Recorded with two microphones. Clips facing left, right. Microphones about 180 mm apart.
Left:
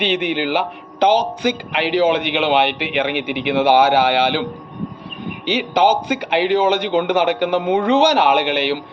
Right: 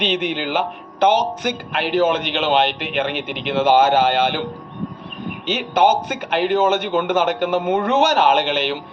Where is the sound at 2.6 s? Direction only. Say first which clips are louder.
Left 2 dB; 65° left (ahead or behind).